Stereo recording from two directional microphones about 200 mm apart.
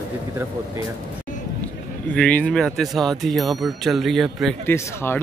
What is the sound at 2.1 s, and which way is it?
Speech, 5° left (ahead or behind).